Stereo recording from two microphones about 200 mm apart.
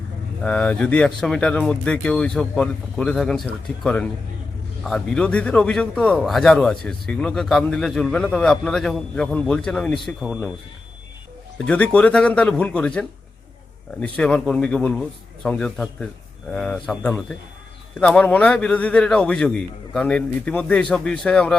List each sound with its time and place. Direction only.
0.4 s a man's voice: 5° left (ahead or behind)
11.5 s a man's voice: 5° left (ahead or behind)